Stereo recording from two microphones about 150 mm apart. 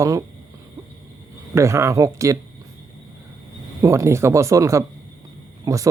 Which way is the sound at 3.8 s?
20° right (ahead or behind).